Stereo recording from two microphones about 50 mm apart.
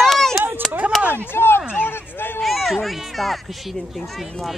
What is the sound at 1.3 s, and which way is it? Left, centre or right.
Speech, left.